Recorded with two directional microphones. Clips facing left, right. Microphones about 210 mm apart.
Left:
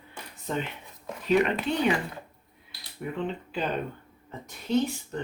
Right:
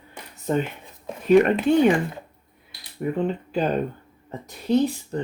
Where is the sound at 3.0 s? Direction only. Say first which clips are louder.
Right 7 dB; 45° right (ahead or behind).